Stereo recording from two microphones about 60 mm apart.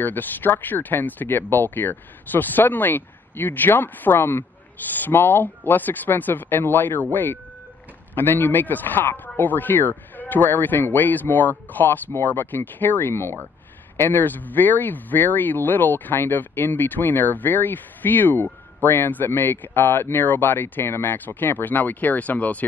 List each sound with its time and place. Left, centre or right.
0.0 s speech: left